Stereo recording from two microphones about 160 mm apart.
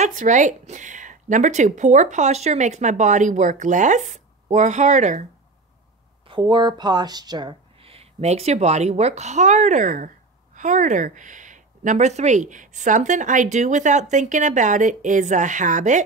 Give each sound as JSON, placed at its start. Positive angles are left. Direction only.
{"t": 0.0, "sound": "speech", "side_deg": -50}
{"t": 6.2, "sound": "speech", "side_deg": -30}